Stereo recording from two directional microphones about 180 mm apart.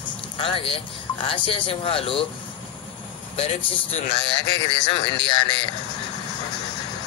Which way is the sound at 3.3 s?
35° left (ahead or behind).